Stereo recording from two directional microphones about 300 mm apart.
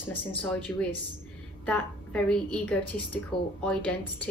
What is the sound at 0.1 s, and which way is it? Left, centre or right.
Speech, centre.